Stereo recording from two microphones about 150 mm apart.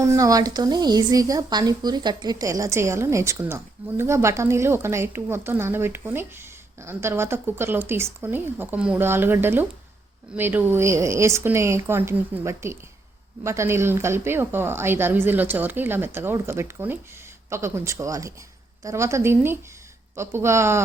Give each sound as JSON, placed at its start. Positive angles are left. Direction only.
{"t": 0.0, "sound": "a woman's voice", "side_deg": -20}